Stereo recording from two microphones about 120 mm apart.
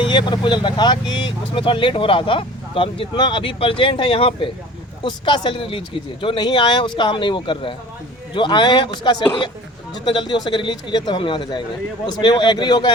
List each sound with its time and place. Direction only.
0.0 s speech: 40° left (ahead or behind)